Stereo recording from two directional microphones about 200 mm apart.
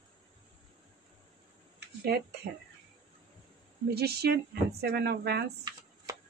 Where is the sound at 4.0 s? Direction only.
55° right (ahead or behind).